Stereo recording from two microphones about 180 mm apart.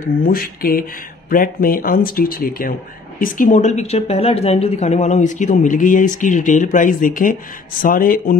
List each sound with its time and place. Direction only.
0.2 s speech: 55° left (ahead or behind)